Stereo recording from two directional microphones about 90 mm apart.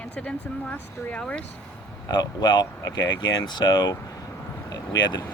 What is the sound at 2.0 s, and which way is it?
Speech, 50° left (ahead or behind).